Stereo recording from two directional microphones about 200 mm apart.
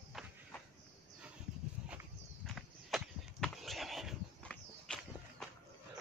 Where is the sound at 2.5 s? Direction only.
Centre (ahead or behind).